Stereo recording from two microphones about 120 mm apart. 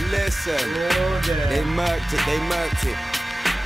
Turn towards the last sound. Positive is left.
turn(degrees=0)  # may be behind; listen again after turning